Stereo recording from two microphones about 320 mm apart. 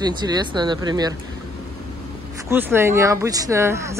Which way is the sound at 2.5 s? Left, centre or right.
Centre.